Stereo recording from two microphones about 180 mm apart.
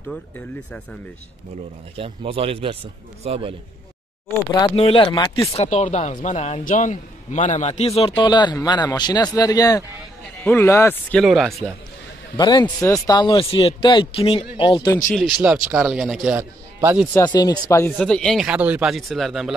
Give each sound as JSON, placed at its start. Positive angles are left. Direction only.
{"t": 2.0, "sound": "speech", "side_deg": -30}
{"t": 4.6, "sound": "speech", "side_deg": 25}
{"t": 12.4, "sound": "speech", "side_deg": 25}
{"t": 15.1, "sound": "a man's voice", "side_deg": 0}
{"t": 17.1, "sound": "speech", "side_deg": 20}
{"t": 17.9, "sound": "a man's voice", "side_deg": 5}